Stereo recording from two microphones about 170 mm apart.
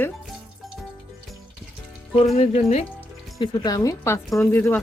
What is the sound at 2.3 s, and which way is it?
Speech, 40° left (ahead or behind).